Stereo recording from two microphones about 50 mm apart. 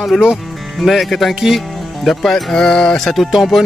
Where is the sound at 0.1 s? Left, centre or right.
Centre.